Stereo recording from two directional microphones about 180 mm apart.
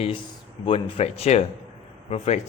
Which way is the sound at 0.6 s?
35° left (ahead or behind).